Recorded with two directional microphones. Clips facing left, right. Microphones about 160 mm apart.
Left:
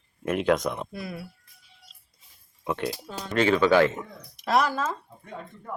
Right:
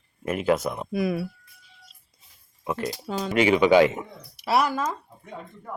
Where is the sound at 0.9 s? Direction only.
90° right.